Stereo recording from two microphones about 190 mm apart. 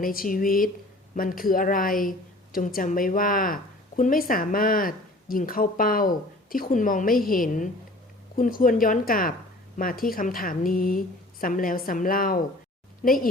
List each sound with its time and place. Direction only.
0.0 s a woman's voice: 45° left (ahead or behind)